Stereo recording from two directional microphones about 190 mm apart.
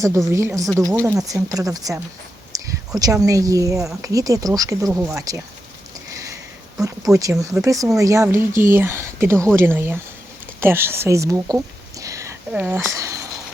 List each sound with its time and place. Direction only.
0.3 s speech: 15° right (ahead or behind)
6.8 s speech: 15° right (ahead or behind)